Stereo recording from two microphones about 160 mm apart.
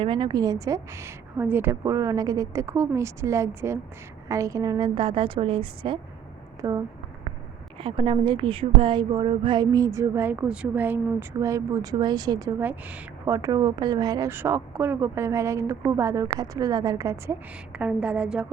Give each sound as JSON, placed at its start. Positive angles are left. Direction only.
{"t": 0.0, "sound": "a woman's voice", "side_deg": -30}
{"t": 6.6, "sound": "speech", "side_deg": -20}
{"t": 7.8, "sound": "a woman's voice", "side_deg": -35}